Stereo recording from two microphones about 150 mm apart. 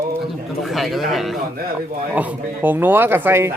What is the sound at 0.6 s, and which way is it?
A man's voice, centre (ahead or behind).